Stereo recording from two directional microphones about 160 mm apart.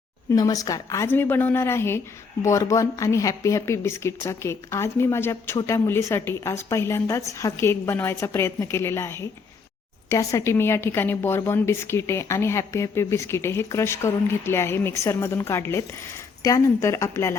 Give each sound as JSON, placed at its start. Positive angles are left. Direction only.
{"t": 0.3, "sound": "a woman's voice", "side_deg": 20}